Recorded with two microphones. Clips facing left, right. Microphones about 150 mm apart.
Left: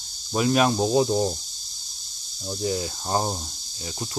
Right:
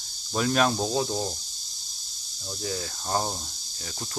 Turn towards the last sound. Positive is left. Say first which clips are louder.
# left 5 dB
turn(degrees=15)  # may be behind; listen again after turning